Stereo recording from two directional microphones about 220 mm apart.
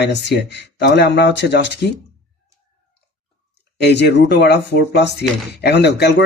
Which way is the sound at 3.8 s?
50° left (ahead or behind).